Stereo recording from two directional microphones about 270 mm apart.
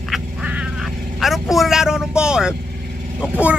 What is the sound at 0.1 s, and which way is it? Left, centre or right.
Quack, centre.